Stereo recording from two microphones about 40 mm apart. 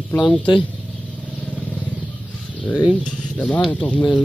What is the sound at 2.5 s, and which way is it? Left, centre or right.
Bird, left.